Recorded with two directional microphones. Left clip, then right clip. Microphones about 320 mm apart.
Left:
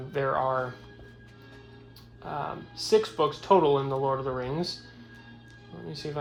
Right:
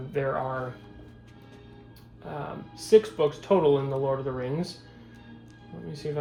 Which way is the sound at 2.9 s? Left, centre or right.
Centre.